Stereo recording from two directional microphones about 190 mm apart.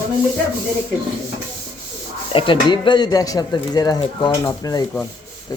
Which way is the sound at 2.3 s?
25° left (ahead or behind).